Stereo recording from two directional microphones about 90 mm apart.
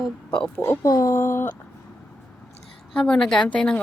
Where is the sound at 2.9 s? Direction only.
5° left (ahead or behind).